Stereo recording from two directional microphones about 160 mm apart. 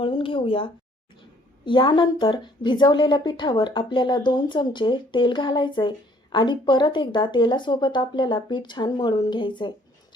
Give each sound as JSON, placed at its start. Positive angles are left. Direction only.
{"t": 0.0, "sound": "speech", "side_deg": 35}